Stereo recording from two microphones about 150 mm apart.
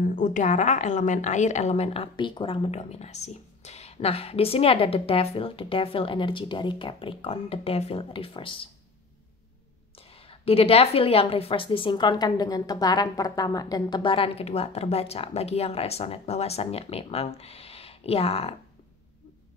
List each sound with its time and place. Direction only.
0.0 s a woman's voice: 55° left (ahead or behind); by 8.5 s 35° left (ahead or behind)
9.9 s a woman's voice: 40° left (ahead or behind)